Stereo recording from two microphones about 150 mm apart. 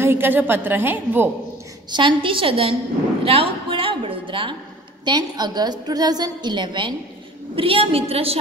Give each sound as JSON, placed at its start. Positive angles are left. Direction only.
{"t": 0.0, "sound": "a woman's voice", "side_deg": -15}
{"t": 1.9, "sound": "a woman's voice", "side_deg": -30}
{"t": 3.3, "sound": "a sound", "side_deg": -40}
{"t": 5.0, "sound": "a woman's voice", "side_deg": -30}